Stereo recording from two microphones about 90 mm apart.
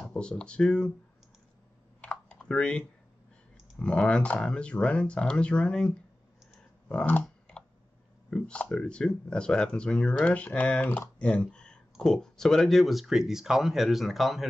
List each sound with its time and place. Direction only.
0.1 s speech: 10° left (ahead or behind)
2.0 s computer keyboard: 10° left (ahead or behind)
3.8 s speech: 10° left (ahead or behind)
7.1 s computer keyboard: 15° left (ahead or behind)
8.3 s speech: 10° left (ahead or behind)